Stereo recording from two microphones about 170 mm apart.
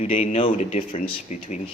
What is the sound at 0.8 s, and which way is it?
Speech, 45° left (ahead or behind).